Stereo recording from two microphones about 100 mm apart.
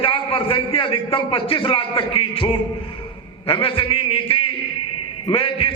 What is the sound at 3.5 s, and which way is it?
A man's voice, 60° left (ahead or behind).